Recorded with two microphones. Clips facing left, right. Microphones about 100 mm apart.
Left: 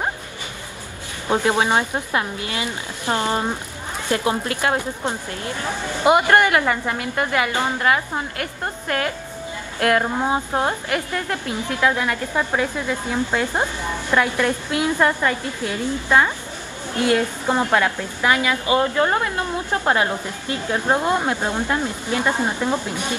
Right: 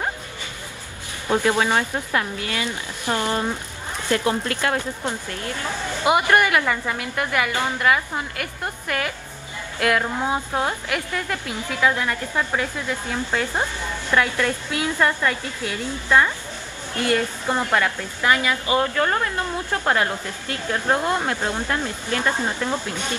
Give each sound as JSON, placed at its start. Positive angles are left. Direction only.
{"t": 1.3, "sound": "a woman's voice", "side_deg": 20}